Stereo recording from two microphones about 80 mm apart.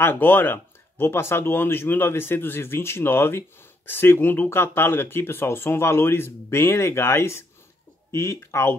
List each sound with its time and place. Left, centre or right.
0.0 s speech: left